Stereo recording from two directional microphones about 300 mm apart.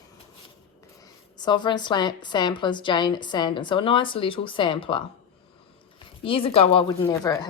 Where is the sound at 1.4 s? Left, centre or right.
Centre.